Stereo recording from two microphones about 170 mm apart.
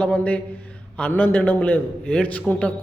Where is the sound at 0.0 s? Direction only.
5° left (ahead or behind).